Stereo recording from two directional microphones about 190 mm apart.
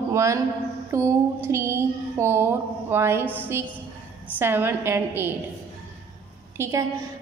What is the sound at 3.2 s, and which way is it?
Speech, 10° left (ahead or behind).